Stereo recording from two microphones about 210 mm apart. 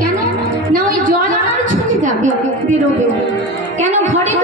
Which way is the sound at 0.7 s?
40° right (ahead or behind).